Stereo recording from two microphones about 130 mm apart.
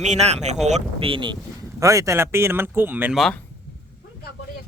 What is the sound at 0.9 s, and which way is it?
Speech, 45° right (ahead or behind).